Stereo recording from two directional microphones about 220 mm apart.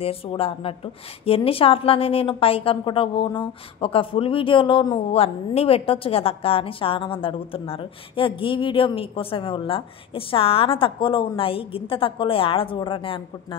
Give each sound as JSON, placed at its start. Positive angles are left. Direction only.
{"t": 0.0, "sound": "a woman's voice", "side_deg": 25}